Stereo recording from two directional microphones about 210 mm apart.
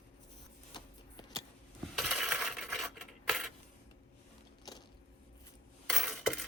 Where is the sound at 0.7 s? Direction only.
20° left (ahead or behind).